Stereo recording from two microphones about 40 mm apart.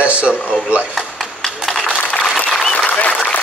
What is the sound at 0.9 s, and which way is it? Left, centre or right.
Chop, centre.